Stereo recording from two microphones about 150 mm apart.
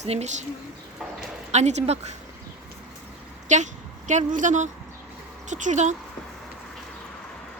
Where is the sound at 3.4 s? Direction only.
55° right (ahead or behind).